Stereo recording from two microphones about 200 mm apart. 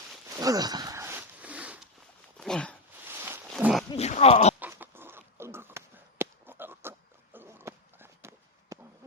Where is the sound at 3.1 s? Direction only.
10° right (ahead or behind).